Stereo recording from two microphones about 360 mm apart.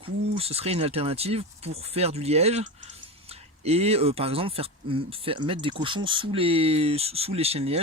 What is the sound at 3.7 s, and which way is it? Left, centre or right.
Speech, centre.